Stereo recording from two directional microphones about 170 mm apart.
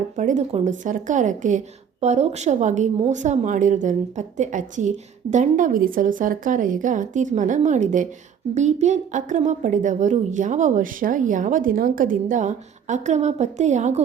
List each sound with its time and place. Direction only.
0.2 s a woman's voice: 45° right (ahead or behind)